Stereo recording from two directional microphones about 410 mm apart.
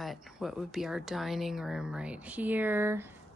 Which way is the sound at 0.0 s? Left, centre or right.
Centre.